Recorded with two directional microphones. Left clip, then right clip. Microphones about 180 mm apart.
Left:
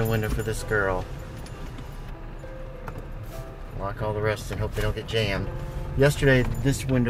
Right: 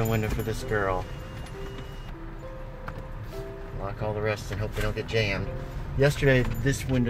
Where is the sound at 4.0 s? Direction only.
10° left (ahead or behind).